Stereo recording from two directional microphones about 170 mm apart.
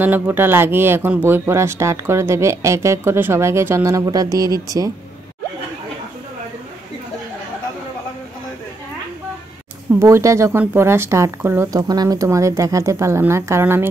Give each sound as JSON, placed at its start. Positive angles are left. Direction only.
{"t": 0.0, "sound": "speech", "side_deg": -10}
{"t": 9.9, "sound": "speech", "side_deg": -15}